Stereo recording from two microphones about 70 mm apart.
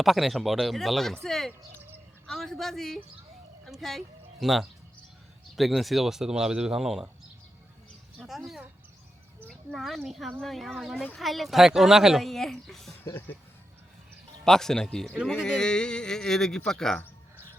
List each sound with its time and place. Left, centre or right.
0.0 s speech: centre
8.3 s speech: centre
14.4 s speech: centre